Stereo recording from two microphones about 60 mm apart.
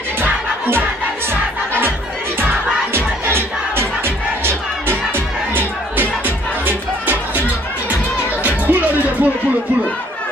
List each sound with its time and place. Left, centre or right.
0.2 s music: right
2.3 s crowd: right
3.3 s music: right
8.5 s music: right